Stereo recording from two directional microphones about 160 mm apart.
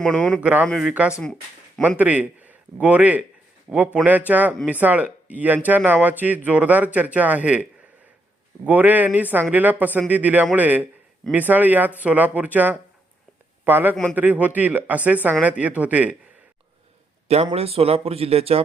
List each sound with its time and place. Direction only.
0.0 s speech: 5° left (ahead or behind)
0.4 s a man's voice: 10° right (ahead or behind)
13.9 s speech: 5° left (ahead or behind)
14.2 s speech: 10° right (ahead or behind)
17.2 s speech: 40° right (ahead or behind)